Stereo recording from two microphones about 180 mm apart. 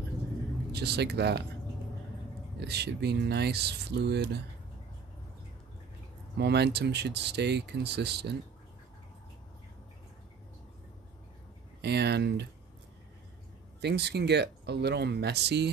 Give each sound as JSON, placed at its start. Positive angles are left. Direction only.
{"t": 0.7, "sound": "speech", "side_deg": -65}
{"t": 2.6, "sound": "speech", "side_deg": -65}
{"t": 6.3, "sound": "speech", "side_deg": -65}
{"t": 11.8, "sound": "speech", "side_deg": -65}
{"t": 13.7, "sound": "speech", "side_deg": -70}